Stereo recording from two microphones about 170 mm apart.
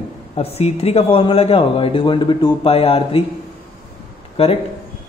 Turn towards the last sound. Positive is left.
turn(degrees=35)  # may be behind; listen again after turning